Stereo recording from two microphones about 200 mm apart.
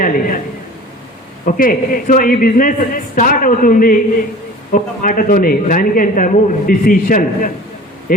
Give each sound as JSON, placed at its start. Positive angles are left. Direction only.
{"t": 0.0, "sound": "a man's voice", "side_deg": 45}
{"t": 1.5, "sound": "a man's voice", "side_deg": 45}